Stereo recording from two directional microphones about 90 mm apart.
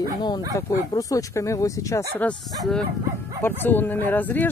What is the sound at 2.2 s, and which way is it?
Speech, 15° left (ahead or behind).